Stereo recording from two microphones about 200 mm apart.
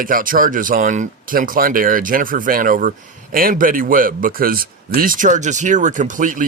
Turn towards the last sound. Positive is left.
turn(degrees=-40)  # may be behind; listen again after turning